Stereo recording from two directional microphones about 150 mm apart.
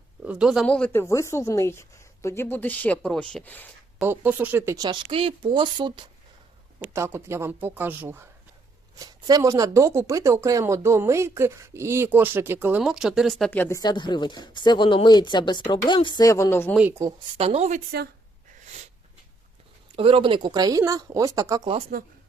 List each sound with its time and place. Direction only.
0.3 s speech: 5° right (ahead or behind)
1.0 s a woman's voice: 20° left (ahead or behind)
4.0 s speech: 15° right (ahead or behind)
4.8 s speech: 35° right (ahead or behind)
6.7 s speech: 20° right (ahead or behind)
9.0 s speech: 25° right (ahead or behind); by 13.5 s centre (ahead or behind)
13.5 s speech: 15° left (ahead or behind)
16.9 s speech: 20° right (ahead or behind)
17.3 s a woman's voice: 45° right (ahead or behind)
17.7 s speech: 90° right
20.0 s speech: 40° right (ahead or behind)
21.7 s a woman's voice: 45° right (ahead or behind)